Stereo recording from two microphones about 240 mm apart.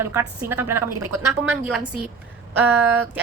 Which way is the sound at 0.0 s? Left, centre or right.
Centre.